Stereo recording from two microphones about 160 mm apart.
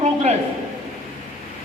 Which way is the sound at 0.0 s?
45° right (ahead or behind).